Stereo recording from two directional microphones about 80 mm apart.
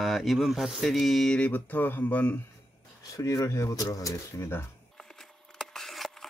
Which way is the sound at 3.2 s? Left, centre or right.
Left.